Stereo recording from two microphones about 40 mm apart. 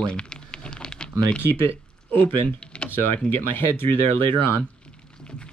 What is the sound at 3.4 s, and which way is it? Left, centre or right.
Speech, left.